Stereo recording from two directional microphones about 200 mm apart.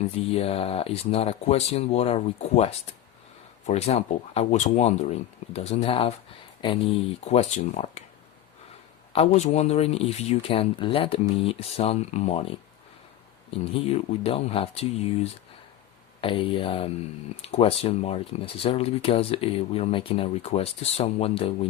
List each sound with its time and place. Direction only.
0.3 s speech: 30° left (ahead or behind)
9.1 s speech: 35° left (ahead or behind)